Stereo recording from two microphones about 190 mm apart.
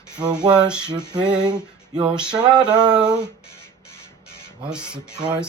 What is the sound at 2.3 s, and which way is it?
Male singing, 25° right (ahead or behind).